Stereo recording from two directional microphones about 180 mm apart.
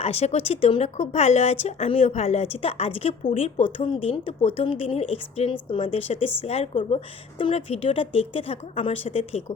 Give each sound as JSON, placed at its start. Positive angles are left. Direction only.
{"t": 0.0, "sound": "speech", "side_deg": 35}